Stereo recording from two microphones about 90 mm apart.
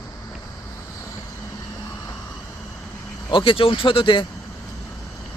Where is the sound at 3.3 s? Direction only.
75° left (ahead or behind).